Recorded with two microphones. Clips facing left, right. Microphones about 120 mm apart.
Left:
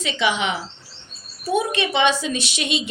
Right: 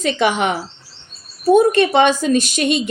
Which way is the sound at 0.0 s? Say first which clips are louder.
Right 5 dB; 50° right (ahead or behind).